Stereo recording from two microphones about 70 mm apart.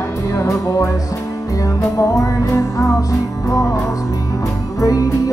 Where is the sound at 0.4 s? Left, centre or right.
Left.